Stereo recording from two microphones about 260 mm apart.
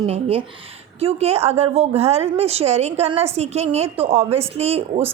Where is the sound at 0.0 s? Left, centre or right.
Right.